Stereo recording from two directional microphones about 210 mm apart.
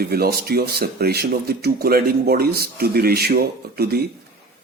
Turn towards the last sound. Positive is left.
turn(degrees=-50)  # may be behind; listen again after turning